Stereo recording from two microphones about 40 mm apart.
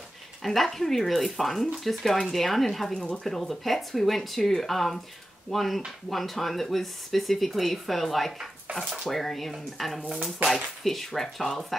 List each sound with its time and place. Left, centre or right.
0.4 s speech: centre
2.9 s speech: centre
3.3 s speech: centre
8.7 s speech: right
9.1 s speech: centre
10.0 s speech: centre
10.5 s speech: centre